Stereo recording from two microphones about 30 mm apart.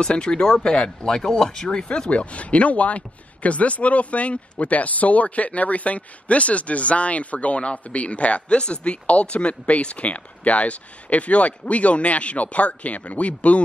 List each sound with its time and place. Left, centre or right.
0.1 s speech: left
0.7 s speech: left
1.9 s speech: left